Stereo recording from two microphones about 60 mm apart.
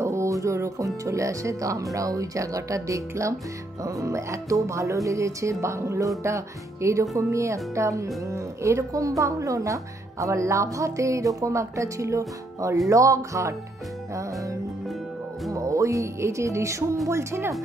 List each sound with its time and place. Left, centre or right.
0.0 s speech: right
15.5 s music: right
17.1 s speech: right